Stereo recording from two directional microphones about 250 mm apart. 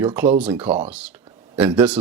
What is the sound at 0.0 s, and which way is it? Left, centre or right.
Speech, centre.